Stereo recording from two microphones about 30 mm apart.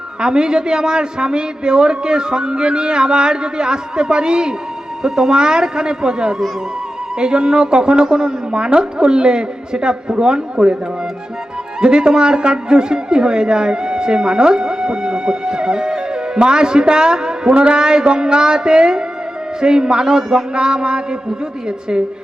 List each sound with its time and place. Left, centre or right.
0.2 s a woman's voice: right
5.0 s a woman's voice: centre
11.8 s a woman's voice: right
20.1 s speech: centre
20.5 s a woman's voice: right